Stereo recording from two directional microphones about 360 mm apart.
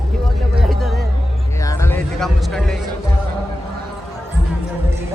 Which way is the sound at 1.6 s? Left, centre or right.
Centre.